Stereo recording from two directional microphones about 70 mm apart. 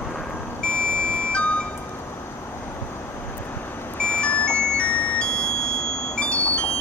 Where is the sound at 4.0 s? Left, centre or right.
Centre.